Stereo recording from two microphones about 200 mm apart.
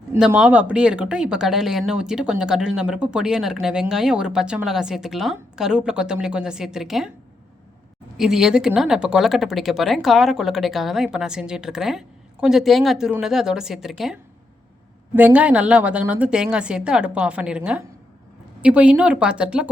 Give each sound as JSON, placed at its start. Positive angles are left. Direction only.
{"t": 0.1, "sound": "speech", "side_deg": -5}
{"t": 8.2, "sound": "speech", "side_deg": -5}